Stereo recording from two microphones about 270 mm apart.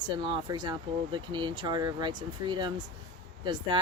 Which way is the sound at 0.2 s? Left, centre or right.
Centre.